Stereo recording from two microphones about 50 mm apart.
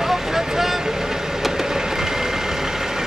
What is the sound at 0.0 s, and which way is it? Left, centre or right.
Vehicle, centre.